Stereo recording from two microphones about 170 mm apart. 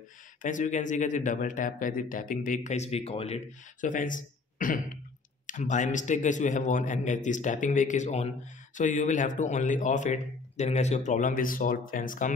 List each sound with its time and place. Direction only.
0.4 s speech: 50° left (ahead or behind)
3.8 s speech: 50° left (ahead or behind)